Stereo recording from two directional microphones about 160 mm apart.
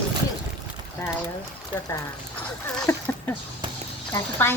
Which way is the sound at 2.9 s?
15° left (ahead or behind).